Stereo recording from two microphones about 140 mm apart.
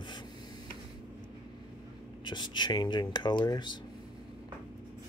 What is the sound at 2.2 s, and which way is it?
Speech, 35° left (ahead or behind).